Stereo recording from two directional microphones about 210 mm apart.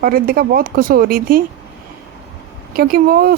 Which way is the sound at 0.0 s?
45° right (ahead or behind).